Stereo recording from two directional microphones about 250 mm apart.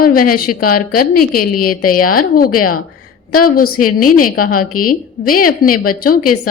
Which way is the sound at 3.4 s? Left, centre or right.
Left.